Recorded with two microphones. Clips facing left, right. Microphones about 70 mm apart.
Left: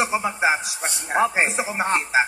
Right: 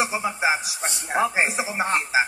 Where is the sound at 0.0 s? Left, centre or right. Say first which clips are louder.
Left 2 dB; centre.